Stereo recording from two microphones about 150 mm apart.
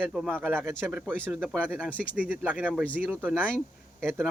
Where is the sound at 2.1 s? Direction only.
10° right (ahead or behind).